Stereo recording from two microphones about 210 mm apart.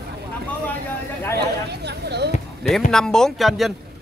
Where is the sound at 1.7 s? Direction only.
50° right (ahead or behind).